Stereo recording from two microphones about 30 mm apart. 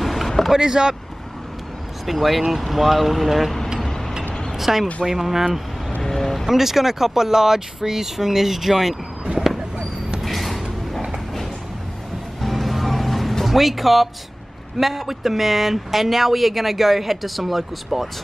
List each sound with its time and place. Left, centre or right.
0.0 s boat: centre
0.5 s speech: centre
2.0 s speech: centre
3.8 s a sound: centre
4.6 s speech: centre
6.0 s speech: centre
6.4 s speech: centre
10.2 s creak: centre
12.4 s music: centre
13.5 s speech: centre